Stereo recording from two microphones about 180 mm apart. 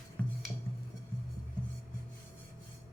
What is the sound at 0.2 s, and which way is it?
Music, 10° left (ahead or behind).